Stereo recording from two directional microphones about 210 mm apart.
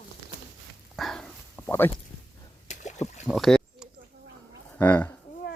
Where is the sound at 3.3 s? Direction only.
Centre (ahead or behind).